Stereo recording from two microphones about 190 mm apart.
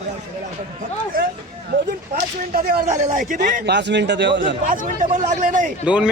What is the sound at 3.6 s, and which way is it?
Speech, 65° right (ahead or behind).